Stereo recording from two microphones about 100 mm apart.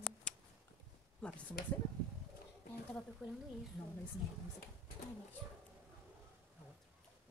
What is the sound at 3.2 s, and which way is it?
Speech, 5° right (ahead or behind).